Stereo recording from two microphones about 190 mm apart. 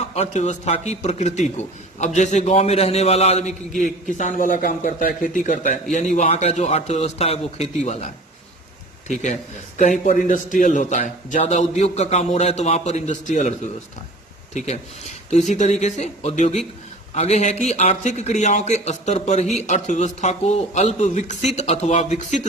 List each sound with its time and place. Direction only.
0.1 s a man's voice: 35° left (ahead or behind)
14.5 s a man's voice: 35° left (ahead or behind)